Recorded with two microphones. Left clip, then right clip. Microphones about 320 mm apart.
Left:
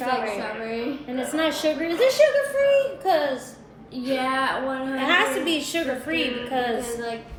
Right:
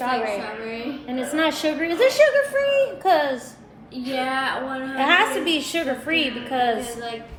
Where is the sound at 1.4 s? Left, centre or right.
Centre.